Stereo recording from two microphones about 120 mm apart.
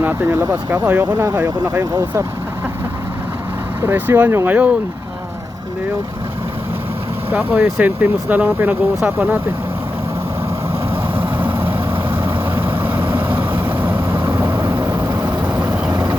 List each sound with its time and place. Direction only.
0.0 s speech: 15° right (ahead or behind)
1.8 s speech: 30° right (ahead or behind)
3.8 s speech: 15° right (ahead or behind)
7.6 s speech: 15° right (ahead or behind)
11.2 s vehicle: 15° right (ahead or behind)
15.9 s vehicle: 35° right (ahead or behind)